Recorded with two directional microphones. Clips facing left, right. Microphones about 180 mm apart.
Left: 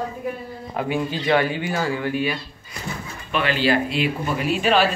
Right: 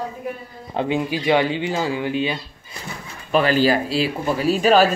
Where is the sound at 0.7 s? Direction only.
25° right (ahead or behind).